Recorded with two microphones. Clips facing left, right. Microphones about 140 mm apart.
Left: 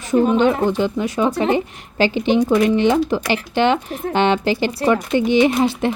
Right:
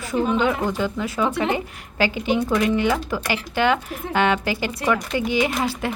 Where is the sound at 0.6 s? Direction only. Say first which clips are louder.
Left 5 dB; 25° left (ahead or behind).